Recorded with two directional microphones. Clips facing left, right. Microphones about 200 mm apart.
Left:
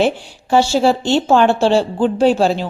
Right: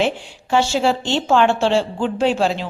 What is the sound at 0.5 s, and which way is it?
A woman's voice, 35° left (ahead or behind).